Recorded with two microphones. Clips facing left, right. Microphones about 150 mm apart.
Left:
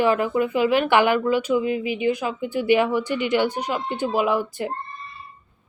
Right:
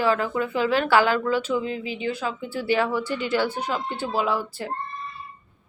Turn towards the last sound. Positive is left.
turn(degrees=20)  # may be behind; listen again after turning